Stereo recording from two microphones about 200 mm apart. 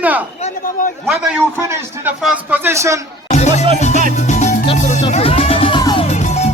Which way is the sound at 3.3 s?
35° left (ahead or behind).